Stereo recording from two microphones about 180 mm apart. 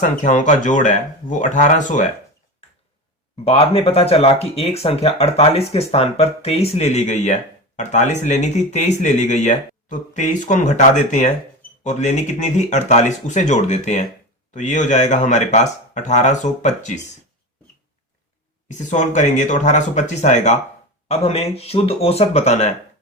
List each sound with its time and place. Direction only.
0.0 s speech: 45° left (ahead or behind)
3.4 s speech: 35° left (ahead or behind)
18.7 s speech: 40° left (ahead or behind)